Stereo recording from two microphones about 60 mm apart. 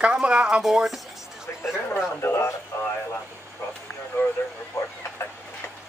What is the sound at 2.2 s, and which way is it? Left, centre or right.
Speech, left.